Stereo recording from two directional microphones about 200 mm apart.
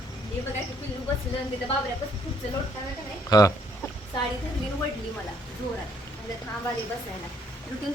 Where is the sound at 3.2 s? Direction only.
20° left (ahead or behind).